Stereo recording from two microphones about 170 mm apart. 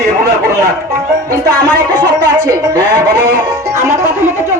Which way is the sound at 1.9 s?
25° right (ahead or behind).